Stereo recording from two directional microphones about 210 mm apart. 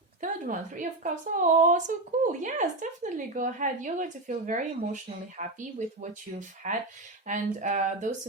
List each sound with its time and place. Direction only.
0.2 s a woman's voice: 40° right (ahead or behind)